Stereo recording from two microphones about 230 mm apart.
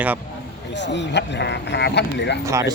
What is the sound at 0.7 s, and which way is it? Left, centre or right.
Speech, left.